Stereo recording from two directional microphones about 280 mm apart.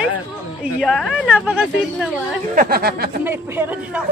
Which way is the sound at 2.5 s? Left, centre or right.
Right.